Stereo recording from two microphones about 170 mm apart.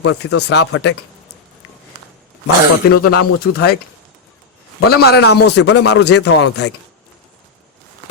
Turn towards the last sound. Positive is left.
turn(degrees=90)